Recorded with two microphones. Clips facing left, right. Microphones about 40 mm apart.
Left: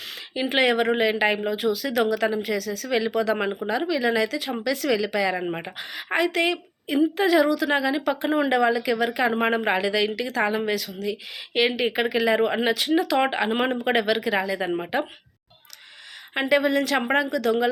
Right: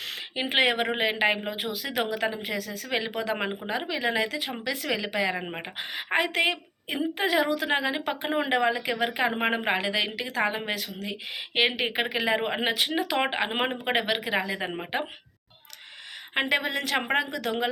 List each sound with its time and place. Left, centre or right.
0.3 s a woman's voice: right
13.7 s a woman's voice: centre; by 14.8 s right
16.3 s a woman's voice: right